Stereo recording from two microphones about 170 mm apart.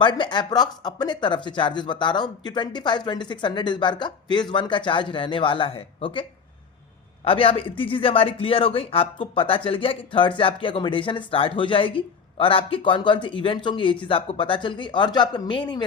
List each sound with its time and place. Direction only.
0.0 s speech: 25° left (ahead or behind)
7.3 s a man's voice: 35° left (ahead or behind)